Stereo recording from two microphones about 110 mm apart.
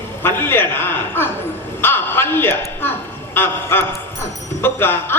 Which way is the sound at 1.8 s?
20° left (ahead or behind).